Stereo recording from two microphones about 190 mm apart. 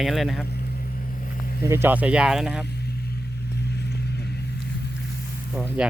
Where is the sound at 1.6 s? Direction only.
15° right (ahead or behind).